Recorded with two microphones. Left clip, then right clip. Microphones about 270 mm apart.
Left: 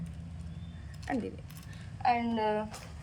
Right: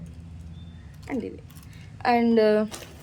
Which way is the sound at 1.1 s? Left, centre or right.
Centre.